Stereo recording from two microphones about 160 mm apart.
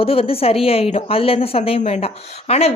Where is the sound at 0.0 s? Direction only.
35° left (ahead or behind).